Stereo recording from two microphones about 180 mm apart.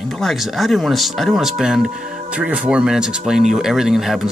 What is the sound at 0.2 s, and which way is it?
Speech, centre (ahead or behind).